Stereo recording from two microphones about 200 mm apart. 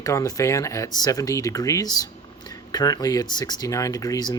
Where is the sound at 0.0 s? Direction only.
15° left (ahead or behind).